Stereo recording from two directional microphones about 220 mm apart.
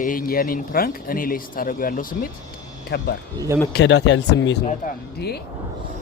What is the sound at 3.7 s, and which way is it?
Speech, 55° left (ahead or behind).